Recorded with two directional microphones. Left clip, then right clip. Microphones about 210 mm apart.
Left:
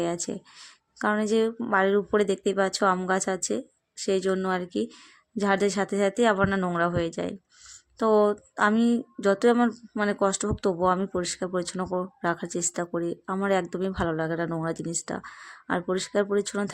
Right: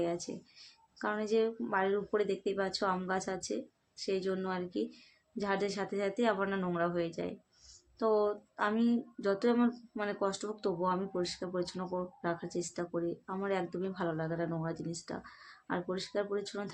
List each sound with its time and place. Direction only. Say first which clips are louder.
0.3 s speech: left 9 dB; 50° left (ahead or behind)